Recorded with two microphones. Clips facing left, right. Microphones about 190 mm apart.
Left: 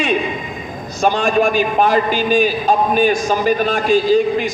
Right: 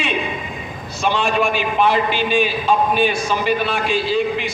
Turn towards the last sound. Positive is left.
turn(degrees=40)  # may be behind; listen again after turning